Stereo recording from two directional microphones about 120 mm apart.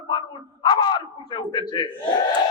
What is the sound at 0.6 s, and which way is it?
Bow-wow, 40° left (ahead or behind).